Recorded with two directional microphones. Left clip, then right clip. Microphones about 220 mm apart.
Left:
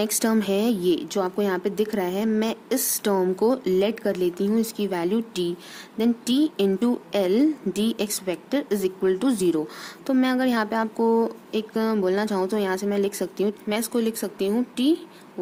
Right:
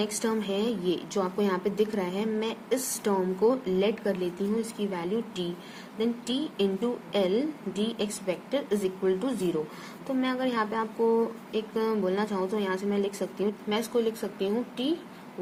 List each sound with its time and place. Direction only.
0.0 s a woman's voice: 45° left (ahead or behind)